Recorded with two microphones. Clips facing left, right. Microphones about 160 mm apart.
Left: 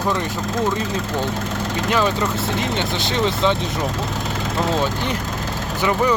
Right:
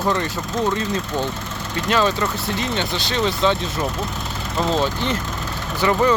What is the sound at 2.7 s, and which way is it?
Speech, 20° left (ahead or behind).